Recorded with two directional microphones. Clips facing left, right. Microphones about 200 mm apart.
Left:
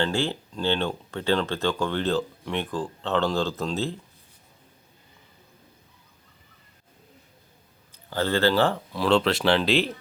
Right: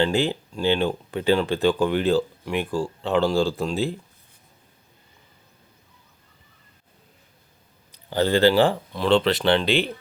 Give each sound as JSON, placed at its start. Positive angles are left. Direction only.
{"t": 0.0, "sound": "speech", "side_deg": -15}
{"t": 8.1, "sound": "speech", "side_deg": -15}
{"t": 8.9, "sound": "speech", "side_deg": 0}